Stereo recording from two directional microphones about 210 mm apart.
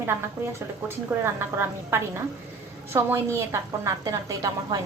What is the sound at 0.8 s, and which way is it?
A woman's voice, 10° right (ahead or behind).